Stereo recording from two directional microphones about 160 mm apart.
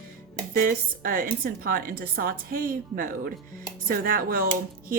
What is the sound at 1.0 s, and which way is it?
A woman's voice, 60° right (ahead or behind).